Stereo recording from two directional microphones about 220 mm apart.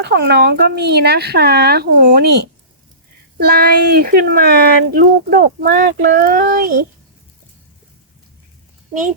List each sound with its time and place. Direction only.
0.0 s speech: 50° right (ahead or behind)